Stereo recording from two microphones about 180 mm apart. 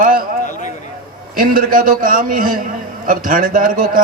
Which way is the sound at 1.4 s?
50° right (ahead or behind).